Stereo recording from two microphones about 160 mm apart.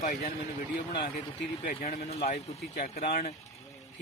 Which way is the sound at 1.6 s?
45° left (ahead or behind).